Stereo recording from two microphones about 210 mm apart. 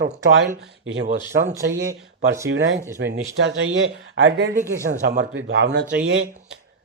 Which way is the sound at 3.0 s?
55° right (ahead or behind).